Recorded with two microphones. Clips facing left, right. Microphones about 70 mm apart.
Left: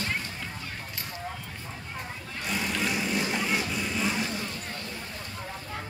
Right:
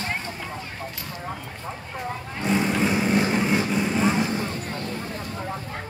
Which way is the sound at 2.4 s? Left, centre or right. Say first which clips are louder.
Right 8 dB; right.